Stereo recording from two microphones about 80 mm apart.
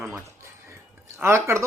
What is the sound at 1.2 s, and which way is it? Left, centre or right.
Speech, right.